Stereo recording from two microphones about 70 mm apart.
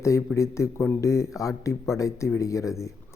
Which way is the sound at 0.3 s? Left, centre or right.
Left.